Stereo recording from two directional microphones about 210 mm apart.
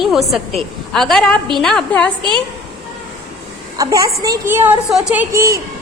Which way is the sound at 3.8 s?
15° right (ahead or behind).